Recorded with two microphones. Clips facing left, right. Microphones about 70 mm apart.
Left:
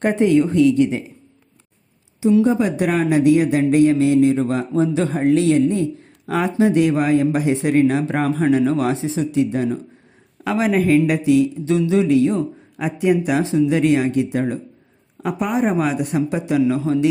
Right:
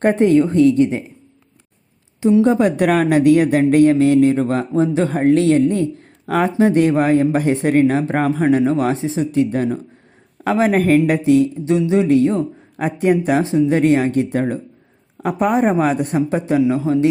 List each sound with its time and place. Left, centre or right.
0.0 s speech: right
2.4 s speech: right
11.7 s speech: right